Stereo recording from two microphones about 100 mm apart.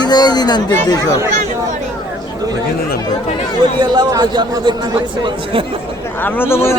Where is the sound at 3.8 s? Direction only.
45° right (ahead or behind).